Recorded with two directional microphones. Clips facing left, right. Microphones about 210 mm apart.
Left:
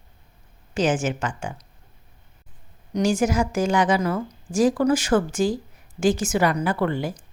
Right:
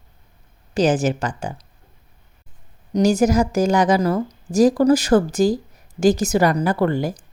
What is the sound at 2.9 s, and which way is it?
A woman's voice, 40° right (ahead or behind).